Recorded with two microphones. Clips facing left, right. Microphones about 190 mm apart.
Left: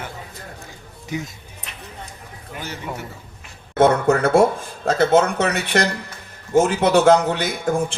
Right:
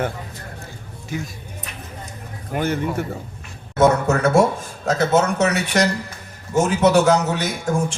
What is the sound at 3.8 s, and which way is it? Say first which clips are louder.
Speech: left 1 dB; 55° left (ahead or behind).